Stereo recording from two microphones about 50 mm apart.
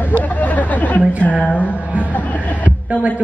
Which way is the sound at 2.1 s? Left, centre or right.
Left.